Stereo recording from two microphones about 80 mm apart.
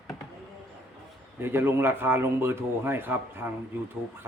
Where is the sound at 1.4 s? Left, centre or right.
Right.